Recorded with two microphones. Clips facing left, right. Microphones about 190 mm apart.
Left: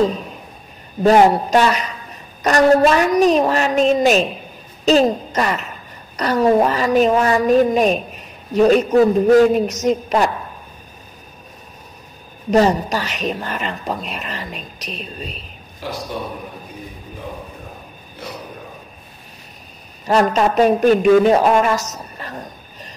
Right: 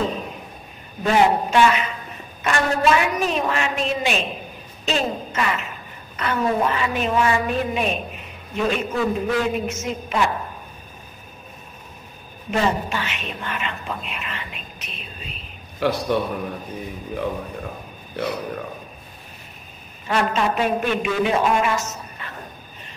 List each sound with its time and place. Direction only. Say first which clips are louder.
1.0 s a woman's voice: left 6 dB; 40° left (ahead or behind)
12.4 s a woman's voice: left 7 dB; 40° left (ahead or behind)
15.8 s a man's voice: right 7 dB; 70° right (ahead or behind)
20.1 s a woman's voice: left 6 dB; 40° left (ahead or behind)